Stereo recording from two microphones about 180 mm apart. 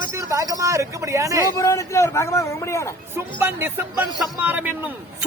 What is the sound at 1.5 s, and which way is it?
A man's voice, 15° left (ahead or behind).